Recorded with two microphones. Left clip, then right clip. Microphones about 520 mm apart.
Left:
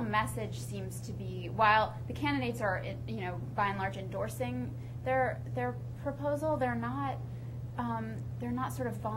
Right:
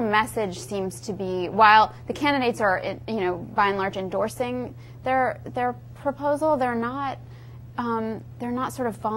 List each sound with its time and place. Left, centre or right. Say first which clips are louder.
0.1 s a woman's voice: right 7 dB; right